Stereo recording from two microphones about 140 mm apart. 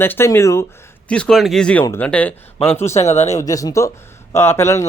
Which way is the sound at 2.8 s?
50° left (ahead or behind).